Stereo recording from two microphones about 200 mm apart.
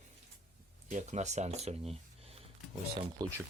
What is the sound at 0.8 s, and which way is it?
Speech, 35° right (ahead or behind).